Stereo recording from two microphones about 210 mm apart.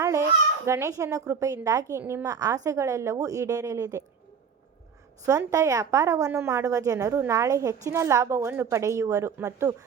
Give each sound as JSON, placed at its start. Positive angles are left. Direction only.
{"t": 0.0, "sound": "a woman's voice", "side_deg": -15}
{"t": 5.2, "sound": "a woman's voice", "side_deg": -15}